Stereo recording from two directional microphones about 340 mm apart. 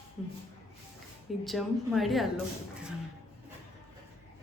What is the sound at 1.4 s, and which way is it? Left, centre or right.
Speech, centre.